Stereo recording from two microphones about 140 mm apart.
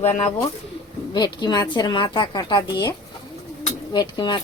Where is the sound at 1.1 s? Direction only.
30° left (ahead or behind).